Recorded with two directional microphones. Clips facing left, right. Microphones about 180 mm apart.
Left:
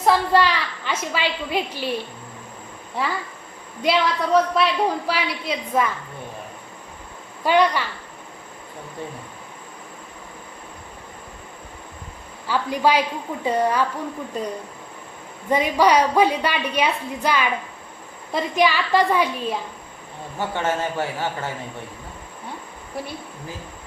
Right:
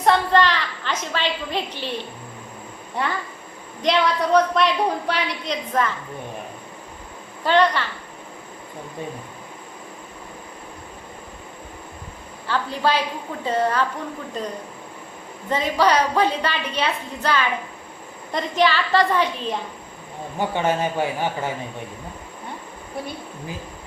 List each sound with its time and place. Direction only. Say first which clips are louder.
0.0 s a sound: even; 5° left (ahead or behind)
2.9 s a woman's voice: even; 5° left (ahead or behind)
7.4 s a woman's voice: even; 10° left (ahead or behind)
12.5 s a woman's voice: left 2 dB; 10° left (ahead or behind)
15.4 s a woman's voice: left 2 dB; 15° left (ahead or behind)
20.4 s a man's voice: right 2 dB; 15° right (ahead or behind)